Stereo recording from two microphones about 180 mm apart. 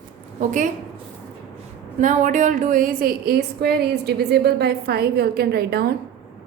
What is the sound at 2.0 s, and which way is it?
A woman's voice, 45° right (ahead or behind).